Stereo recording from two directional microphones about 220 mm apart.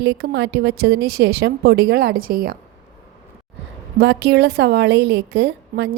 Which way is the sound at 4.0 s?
50° right (ahead or behind).